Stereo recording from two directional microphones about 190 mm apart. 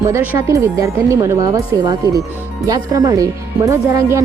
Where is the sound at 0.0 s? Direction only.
15° right (ahead or behind).